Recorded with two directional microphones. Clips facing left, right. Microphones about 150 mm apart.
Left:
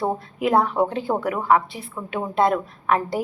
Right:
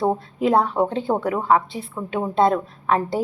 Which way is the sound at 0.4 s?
20° right (ahead or behind).